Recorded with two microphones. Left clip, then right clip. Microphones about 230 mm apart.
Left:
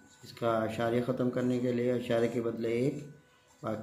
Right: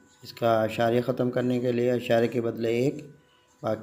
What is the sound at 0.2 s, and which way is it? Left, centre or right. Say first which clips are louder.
Speech: right 7 dB; right.